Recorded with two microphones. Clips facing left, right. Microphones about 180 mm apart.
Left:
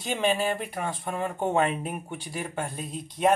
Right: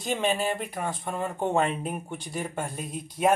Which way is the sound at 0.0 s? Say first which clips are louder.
Left 1 dB; centre (ahead or behind).